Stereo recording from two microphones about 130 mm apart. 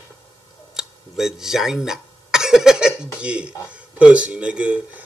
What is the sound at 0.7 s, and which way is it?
Speech, 5° right (ahead or behind).